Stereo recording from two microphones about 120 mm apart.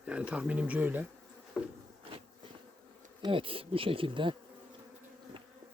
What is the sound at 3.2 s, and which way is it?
Speech, 45° right (ahead or behind).